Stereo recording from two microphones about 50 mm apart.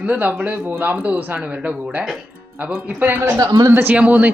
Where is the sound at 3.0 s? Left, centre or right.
Right.